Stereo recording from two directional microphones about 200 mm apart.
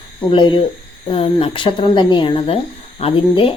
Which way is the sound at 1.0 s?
30° left (ahead or behind).